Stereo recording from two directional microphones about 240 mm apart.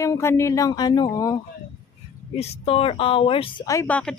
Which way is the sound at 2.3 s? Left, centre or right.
Left.